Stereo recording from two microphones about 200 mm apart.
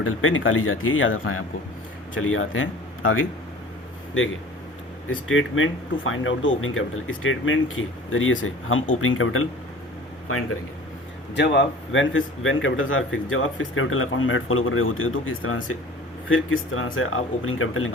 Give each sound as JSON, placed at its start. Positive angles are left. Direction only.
{"t": 0.0, "sound": "speech", "side_deg": 90}
{"t": 5.0, "sound": "speech", "side_deg": 85}
{"t": 11.3, "sound": "speech", "side_deg": 60}